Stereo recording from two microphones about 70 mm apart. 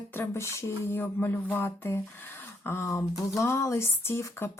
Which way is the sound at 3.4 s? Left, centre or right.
Left.